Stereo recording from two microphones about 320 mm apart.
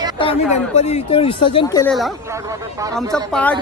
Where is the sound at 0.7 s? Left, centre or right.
Left.